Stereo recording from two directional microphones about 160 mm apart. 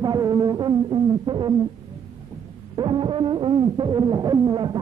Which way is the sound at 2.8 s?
30° right (ahead or behind).